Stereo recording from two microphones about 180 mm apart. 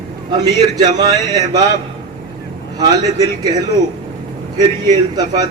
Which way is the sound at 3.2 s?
20° right (ahead or behind).